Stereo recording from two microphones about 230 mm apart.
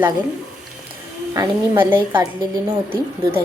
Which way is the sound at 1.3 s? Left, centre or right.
Centre.